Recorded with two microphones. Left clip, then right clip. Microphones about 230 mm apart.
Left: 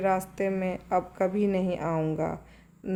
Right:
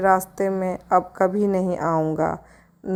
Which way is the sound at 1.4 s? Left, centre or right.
Right.